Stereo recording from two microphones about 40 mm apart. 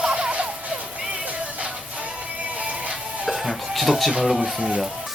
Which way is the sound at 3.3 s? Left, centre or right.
Centre.